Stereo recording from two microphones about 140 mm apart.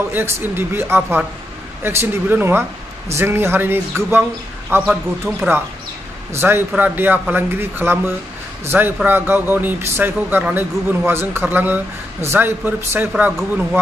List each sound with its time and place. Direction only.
0.1 s speech: 15° right (ahead or behind)
13.1 s speech: 5° right (ahead or behind)